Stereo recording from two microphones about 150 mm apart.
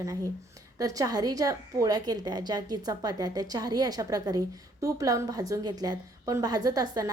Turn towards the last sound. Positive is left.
turn(degrees=-25)  # may be behind; listen again after turning